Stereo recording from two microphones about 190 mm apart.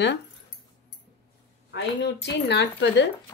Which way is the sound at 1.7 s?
65° left (ahead or behind).